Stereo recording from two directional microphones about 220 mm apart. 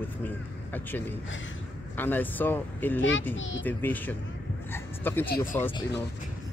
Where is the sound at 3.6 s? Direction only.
10° left (ahead or behind).